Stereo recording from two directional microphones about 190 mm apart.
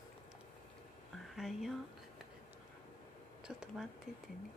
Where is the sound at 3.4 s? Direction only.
5° right (ahead or behind).